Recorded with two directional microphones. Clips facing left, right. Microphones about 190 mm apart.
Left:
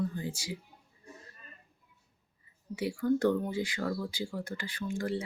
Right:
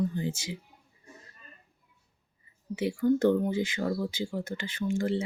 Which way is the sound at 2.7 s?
20° right (ahead or behind).